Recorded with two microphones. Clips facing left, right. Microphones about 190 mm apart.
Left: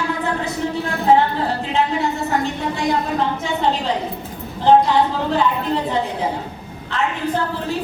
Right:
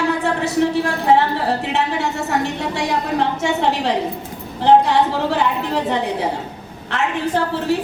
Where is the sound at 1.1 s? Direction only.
75° right (ahead or behind).